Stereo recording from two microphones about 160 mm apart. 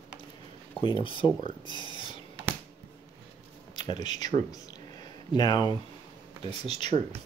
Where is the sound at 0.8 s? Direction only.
30° left (ahead or behind).